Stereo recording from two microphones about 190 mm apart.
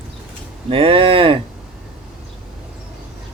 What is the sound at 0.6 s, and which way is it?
Speech, 30° right (ahead or behind).